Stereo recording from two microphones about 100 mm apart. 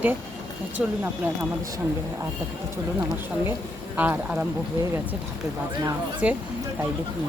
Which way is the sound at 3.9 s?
15° right (ahead or behind).